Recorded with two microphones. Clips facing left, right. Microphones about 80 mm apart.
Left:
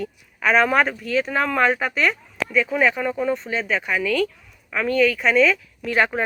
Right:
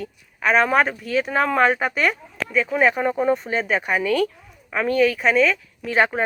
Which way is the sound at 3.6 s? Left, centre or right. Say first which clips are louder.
Right 1 dB; centre.